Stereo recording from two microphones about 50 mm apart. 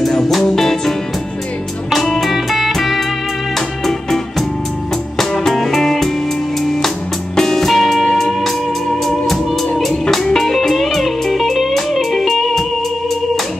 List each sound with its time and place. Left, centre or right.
0.0 s music: centre